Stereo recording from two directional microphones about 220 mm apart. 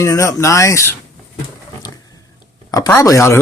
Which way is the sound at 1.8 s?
15° left (ahead or behind).